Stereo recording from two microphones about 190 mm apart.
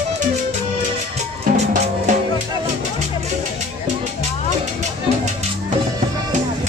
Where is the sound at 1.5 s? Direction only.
40° right (ahead or behind).